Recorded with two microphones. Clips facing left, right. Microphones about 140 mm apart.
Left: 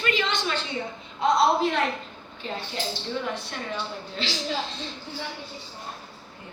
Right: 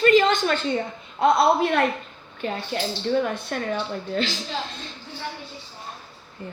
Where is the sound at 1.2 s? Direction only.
60° right (ahead or behind).